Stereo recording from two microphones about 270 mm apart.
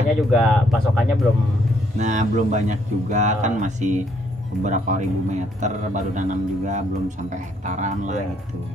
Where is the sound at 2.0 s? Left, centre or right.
Right.